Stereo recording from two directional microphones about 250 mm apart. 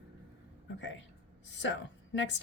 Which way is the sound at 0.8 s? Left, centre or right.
Left.